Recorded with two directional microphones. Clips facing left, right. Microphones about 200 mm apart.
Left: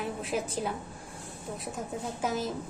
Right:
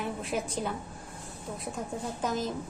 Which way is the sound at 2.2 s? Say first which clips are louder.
Even; 10° left (ahead or behind).